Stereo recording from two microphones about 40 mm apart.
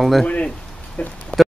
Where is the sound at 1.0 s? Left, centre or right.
Left.